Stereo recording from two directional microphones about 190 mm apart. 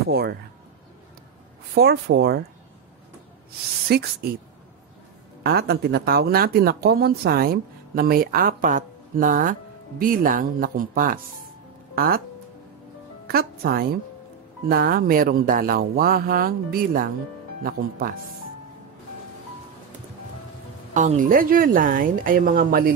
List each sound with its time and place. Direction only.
0.1 s speech: 55° right (ahead or behind)
1.8 s speech: 60° right (ahead or behind)
3.9 s speech: 55° right (ahead or behind)
5.4 s speech: 55° right (ahead or behind)
13.3 s speech: 55° right (ahead or behind)
20.9 s speech: 40° right (ahead or behind)